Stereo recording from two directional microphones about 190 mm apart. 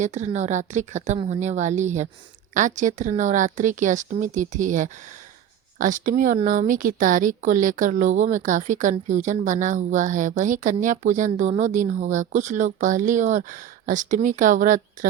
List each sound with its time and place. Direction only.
0.0 s a woman's voice: 40° right (ahead or behind)